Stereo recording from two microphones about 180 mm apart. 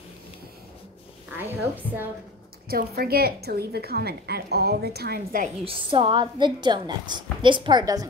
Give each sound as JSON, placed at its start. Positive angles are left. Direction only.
{"t": 1.5, "sound": "a woman's voice", "side_deg": -10}
{"t": 2.7, "sound": "a woman's voice", "side_deg": -55}
{"t": 5.7, "sound": "a woman's voice", "side_deg": -30}